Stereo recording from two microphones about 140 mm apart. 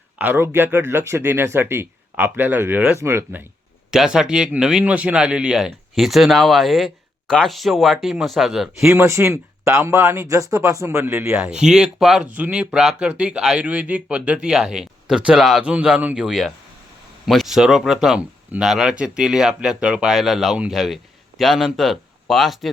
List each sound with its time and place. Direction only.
0.2 s speech: 15° right (ahead or behind)
3.9 s speech: 5° right (ahead or behind)
8.9 s speech: 20° right (ahead or behind); by 22.7 s centre (ahead or behind)